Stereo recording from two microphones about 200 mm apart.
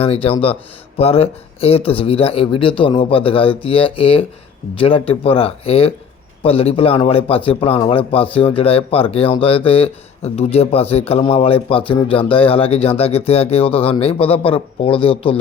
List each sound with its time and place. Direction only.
0.0 s a man's voice: 30° left (ahead or behind)